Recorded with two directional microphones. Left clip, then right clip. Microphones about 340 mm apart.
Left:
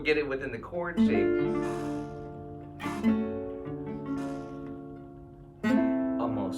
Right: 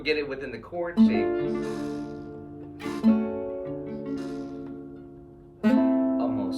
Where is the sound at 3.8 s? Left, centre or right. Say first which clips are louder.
Right 2 dB; centre.